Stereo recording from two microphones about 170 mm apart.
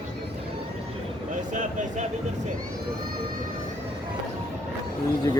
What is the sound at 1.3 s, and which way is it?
Speech, 45° right (ahead or behind).